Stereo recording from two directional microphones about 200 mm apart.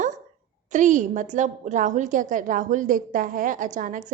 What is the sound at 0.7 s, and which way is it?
A woman's voice, 40° right (ahead or behind).